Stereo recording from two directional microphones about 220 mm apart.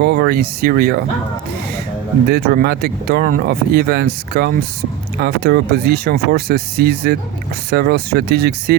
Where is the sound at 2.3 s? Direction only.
45° right (ahead or behind).